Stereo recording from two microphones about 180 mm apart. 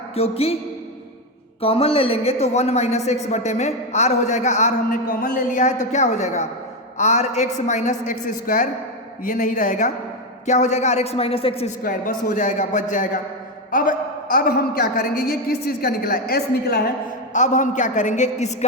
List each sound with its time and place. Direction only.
0.2 s a man's voice: 35° left (ahead or behind)
1.6 s a man's voice: 30° left (ahead or behind)
11.8 s a man's voice: 50° left (ahead or behind)
17.3 s a man's voice: 45° left (ahead or behind)